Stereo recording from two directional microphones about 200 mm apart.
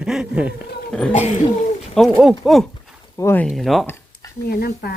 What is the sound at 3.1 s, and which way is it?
Speech, 10° left (ahead or behind).